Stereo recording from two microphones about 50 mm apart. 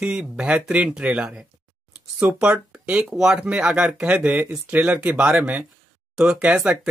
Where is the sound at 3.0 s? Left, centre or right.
Centre.